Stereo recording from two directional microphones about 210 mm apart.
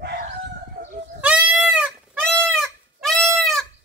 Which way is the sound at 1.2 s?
5° right (ahead or behind).